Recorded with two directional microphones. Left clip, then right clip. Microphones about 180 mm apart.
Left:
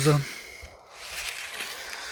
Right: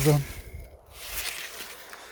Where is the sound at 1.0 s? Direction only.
65° right (ahead or behind).